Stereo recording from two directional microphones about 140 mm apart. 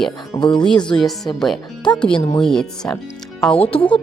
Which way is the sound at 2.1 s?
40° left (ahead or behind).